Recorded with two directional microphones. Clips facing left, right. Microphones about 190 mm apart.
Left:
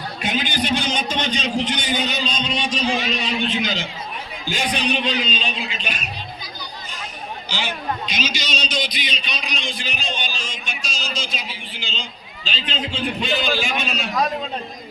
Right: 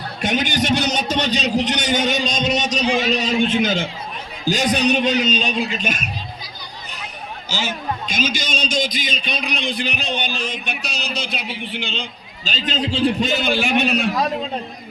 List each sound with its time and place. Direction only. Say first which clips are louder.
0.7 s a man's voice: right 3 dB; 40° right (ahead or behind)
7.5 s a man's voice: right 2 dB; 45° right (ahead or behind); by 12.0 s 60° right (ahead or behind)
12.5 s a man's voice: right 5 dB; 40° right (ahead or behind)
13.6 s a man's voice: right 7 dB; 60° right (ahead or behind)